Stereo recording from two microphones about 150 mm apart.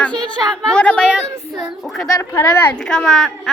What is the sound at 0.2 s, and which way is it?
A woman's voice, 5° left (ahead or behind).